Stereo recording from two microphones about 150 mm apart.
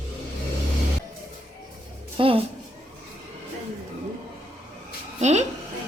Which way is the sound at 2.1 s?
40° right (ahead or behind).